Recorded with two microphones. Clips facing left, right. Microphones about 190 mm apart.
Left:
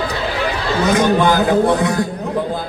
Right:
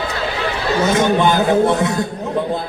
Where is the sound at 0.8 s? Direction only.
25° right (ahead or behind).